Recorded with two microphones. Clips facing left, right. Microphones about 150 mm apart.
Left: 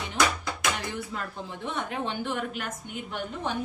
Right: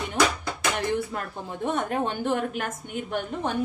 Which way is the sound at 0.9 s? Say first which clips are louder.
Right 5 dB; 50° right (ahead or behind).